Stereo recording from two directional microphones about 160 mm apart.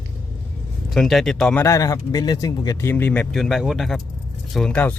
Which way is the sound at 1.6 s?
20° left (ahead or behind).